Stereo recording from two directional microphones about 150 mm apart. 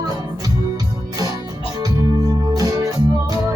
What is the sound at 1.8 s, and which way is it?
Music, 25° right (ahead or behind).